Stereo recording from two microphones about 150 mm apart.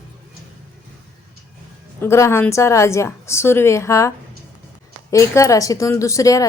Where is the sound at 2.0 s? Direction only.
20° left (ahead or behind).